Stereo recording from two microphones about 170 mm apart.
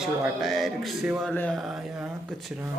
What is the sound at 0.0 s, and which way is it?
Speech, centre (ahead or behind).